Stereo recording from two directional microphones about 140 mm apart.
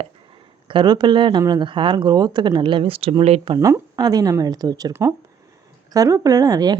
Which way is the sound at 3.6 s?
25° right (ahead or behind).